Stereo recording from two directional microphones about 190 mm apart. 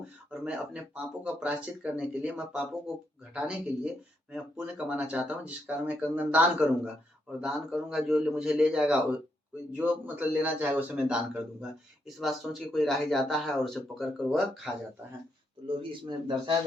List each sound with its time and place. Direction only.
0.3 s a man's voice: 5° right (ahead or behind)
15.6 s speech: 25° right (ahead or behind)